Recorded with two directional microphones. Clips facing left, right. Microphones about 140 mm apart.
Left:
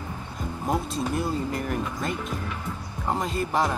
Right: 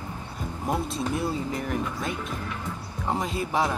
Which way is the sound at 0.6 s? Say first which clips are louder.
Left 1 dB; centre (ahead or behind).